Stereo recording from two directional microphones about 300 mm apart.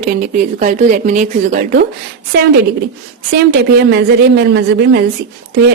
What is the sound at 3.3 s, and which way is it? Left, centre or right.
A woman's voice, right.